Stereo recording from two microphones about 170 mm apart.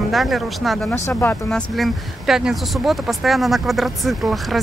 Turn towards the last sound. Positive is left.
turn(degrees=0)  # may be behind; listen again after turning